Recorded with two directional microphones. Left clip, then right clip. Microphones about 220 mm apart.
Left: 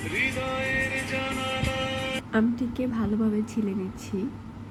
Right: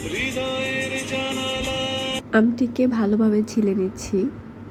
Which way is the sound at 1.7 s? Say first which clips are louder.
Right 4 dB; 15° right (ahead or behind).